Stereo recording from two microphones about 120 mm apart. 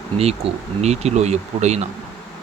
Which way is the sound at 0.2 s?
60° right (ahead or behind).